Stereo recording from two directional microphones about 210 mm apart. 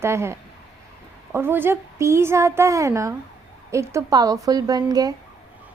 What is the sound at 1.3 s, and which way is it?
A child's voice, 10° right (ahead or behind).